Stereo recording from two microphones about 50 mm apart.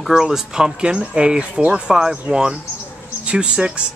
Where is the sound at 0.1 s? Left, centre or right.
Centre.